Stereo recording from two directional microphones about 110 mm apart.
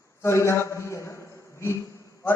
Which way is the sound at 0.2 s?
25° left (ahead or behind).